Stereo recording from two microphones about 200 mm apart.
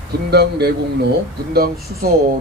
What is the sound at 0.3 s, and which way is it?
Speech, 55° right (ahead or behind).